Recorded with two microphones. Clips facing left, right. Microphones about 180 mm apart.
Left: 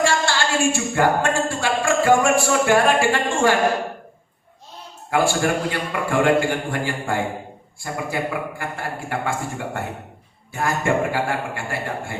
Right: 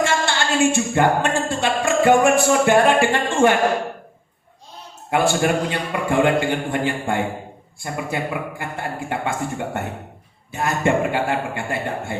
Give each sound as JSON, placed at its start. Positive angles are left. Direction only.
{"t": 0.0, "sound": "speech", "side_deg": -20}
{"t": 5.1, "sound": "a man's voice", "side_deg": -20}